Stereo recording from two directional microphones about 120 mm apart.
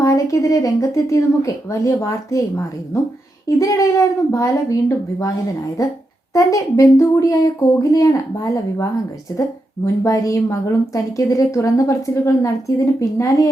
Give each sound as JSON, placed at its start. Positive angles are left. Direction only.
{"t": 0.0, "sound": "a woman's voice", "side_deg": 25}
{"t": 6.3, "sound": "a woman's voice", "side_deg": 25}